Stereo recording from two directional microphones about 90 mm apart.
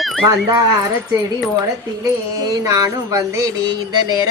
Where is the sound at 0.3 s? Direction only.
50° right (ahead or behind).